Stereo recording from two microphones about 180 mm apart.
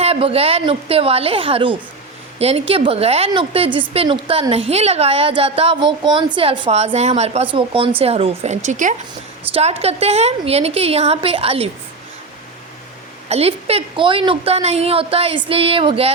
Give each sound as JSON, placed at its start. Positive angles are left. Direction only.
{"t": 0.0, "sound": "a woman's voice", "side_deg": -35}
{"t": 13.2, "sound": "a woman's voice", "side_deg": -35}